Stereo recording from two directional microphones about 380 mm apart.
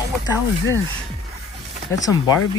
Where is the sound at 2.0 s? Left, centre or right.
Centre.